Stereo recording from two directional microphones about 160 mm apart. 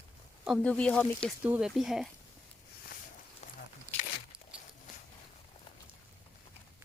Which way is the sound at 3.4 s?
45° left (ahead or behind).